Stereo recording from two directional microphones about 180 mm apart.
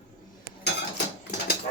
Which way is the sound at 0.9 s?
70° left (ahead or behind).